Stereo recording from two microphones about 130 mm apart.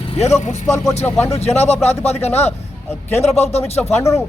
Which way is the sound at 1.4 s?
55° left (ahead or behind).